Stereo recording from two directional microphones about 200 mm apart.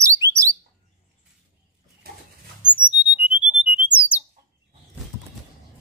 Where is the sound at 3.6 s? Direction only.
25° left (ahead or behind).